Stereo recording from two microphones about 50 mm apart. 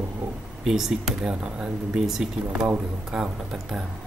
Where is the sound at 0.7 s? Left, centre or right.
Centre.